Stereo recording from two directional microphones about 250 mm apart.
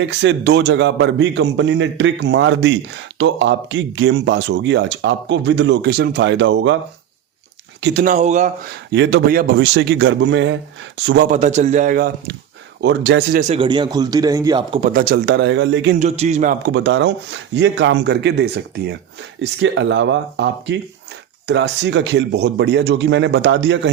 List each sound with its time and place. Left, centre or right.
0.0 s speech: right
7.8 s speech: right
8.0 s a man's voice: right
8.9 s speech: right
11.3 s a man's voice: right
13.5 s a man's voice: centre; by 16.0 s right
16.0 s a man's voice: right
16.7 s speech: right